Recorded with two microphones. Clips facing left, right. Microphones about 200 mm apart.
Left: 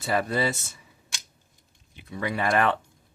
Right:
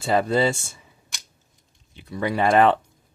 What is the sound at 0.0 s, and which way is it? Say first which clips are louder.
Speech: right 5 dB; 25° right (ahead or behind).